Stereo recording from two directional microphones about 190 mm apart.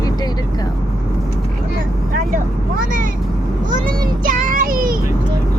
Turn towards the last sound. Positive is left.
turn(degrees=-50)  # may be behind; listen again after turning